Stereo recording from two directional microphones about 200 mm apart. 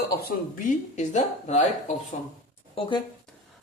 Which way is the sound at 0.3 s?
40° left (ahead or behind).